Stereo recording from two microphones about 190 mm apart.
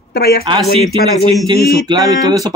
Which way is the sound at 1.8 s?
20° right (ahead or behind).